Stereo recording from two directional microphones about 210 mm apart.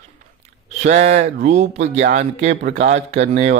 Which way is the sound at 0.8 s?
35° right (ahead or behind).